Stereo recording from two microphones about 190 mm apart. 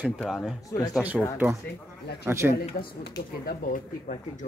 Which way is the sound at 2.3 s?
10° right (ahead or behind).